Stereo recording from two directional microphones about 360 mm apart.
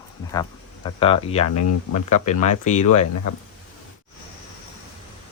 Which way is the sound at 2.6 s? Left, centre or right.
Centre.